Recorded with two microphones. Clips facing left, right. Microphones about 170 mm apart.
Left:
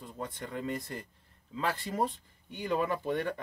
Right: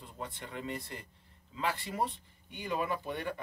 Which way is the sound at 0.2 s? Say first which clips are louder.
Left 4 dB; 40° left (ahead or behind).